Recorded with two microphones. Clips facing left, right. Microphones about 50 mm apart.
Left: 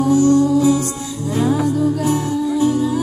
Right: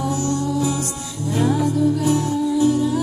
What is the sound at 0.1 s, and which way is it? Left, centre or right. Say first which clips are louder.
Music: left 9 dB; left.